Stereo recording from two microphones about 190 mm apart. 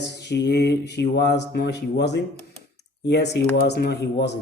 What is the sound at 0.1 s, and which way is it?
A man's voice, 65° left (ahead or behind).